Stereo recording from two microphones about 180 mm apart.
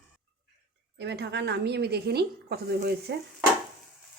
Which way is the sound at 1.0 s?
70° right (ahead or behind).